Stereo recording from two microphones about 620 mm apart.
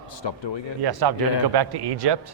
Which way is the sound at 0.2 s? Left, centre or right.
Left.